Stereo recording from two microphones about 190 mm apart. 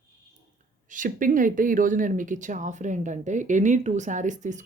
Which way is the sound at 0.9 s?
45° right (ahead or behind).